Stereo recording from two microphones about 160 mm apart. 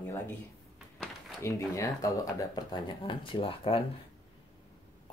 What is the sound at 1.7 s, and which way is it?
Speech, 20° left (ahead or behind).